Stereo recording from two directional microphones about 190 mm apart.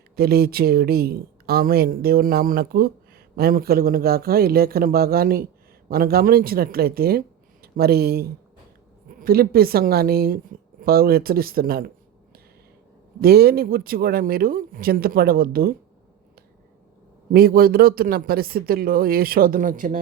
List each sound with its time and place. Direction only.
0.2 s speech: 55° right (ahead or behind)
13.2 s speech: 55° right (ahead or behind)
17.3 s speech: 50° right (ahead or behind)